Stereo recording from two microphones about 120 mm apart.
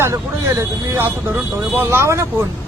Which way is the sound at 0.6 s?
20° right (ahead or behind).